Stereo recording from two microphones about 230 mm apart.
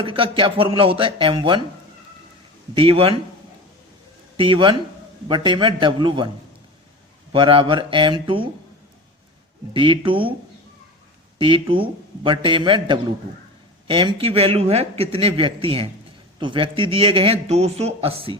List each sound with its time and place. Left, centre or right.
0.0 s a man's voice: right
2.7 s a man's voice: right
4.4 s a man's voice: right
7.3 s a man's voice: right
9.7 s a man's voice: right
11.3 s a man's voice: right